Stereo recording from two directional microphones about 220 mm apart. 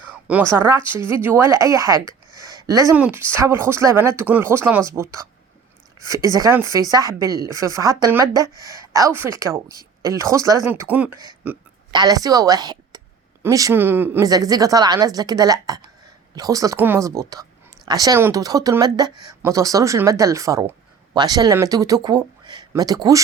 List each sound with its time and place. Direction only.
0.1 s a sound: 5° right (ahead or behind)
0.5 s speech: 10° right (ahead or behind)
6.2 s speech: 15° right (ahead or behind)
11.9 s a woman's voice: 20° right (ahead or behind)